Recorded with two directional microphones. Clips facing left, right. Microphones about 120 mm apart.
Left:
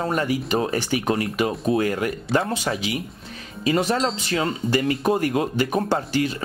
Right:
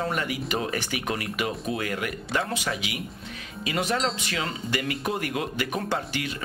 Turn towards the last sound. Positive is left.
turn(degrees=35)  # may be behind; listen again after turning